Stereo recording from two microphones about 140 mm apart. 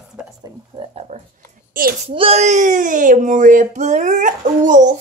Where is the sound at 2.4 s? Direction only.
60° right (ahead or behind).